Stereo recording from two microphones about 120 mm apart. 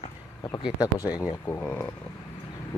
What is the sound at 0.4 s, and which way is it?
Speech, 35° left (ahead or behind).